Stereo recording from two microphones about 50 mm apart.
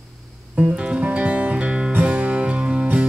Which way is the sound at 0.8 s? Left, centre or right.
Right.